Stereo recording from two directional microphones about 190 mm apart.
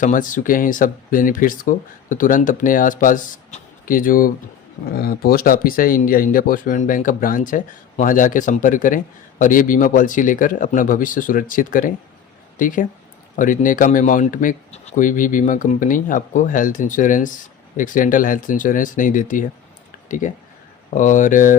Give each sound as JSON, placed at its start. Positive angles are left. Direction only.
{"t": 0.0, "sound": "speech", "side_deg": 45}